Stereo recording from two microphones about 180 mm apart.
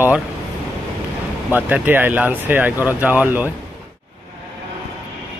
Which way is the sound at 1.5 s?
10° right (ahead or behind).